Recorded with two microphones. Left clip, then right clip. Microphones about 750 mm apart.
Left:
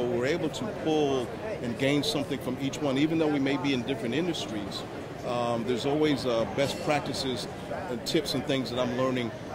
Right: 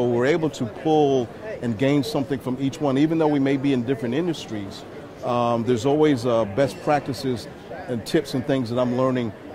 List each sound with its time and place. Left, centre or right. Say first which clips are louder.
0.2 s speech: right 7 dB; right